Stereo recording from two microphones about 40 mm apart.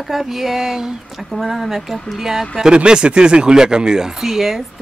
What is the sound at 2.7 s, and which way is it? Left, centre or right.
Speech, right.